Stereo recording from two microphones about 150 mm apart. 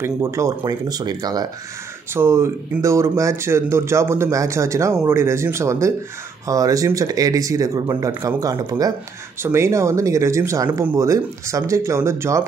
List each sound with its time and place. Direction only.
0.0 s speech: 20° right (ahead or behind)